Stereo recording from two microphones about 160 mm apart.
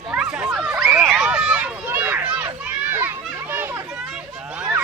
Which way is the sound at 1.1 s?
5° right (ahead or behind).